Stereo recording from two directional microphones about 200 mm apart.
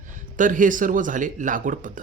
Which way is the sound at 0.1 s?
40° right (ahead or behind).